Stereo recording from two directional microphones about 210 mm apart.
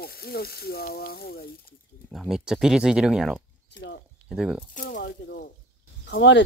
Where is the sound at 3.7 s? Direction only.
55° left (ahead or behind).